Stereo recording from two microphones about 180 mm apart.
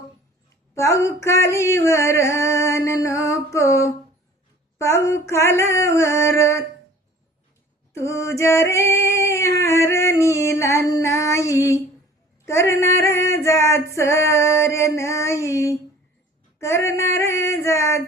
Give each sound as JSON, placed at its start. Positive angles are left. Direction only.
{"t": 0.8, "sound": "female singing", "side_deg": 15}
{"t": 7.9, "sound": "female singing", "side_deg": 15}
{"t": 9.0, "sound": "a sound", "side_deg": 15}
{"t": 12.5, "sound": "female singing", "side_deg": 15}